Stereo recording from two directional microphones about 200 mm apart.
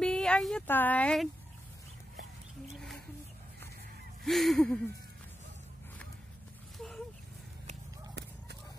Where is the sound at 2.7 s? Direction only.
Centre (ahead or behind).